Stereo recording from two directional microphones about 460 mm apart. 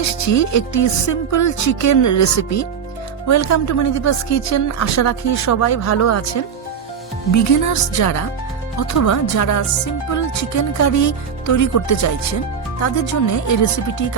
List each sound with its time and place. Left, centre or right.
0.0 s speech: left